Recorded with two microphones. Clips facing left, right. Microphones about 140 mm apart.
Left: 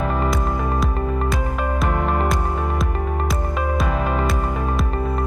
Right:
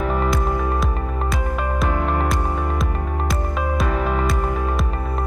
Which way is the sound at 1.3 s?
Centre (ahead or behind).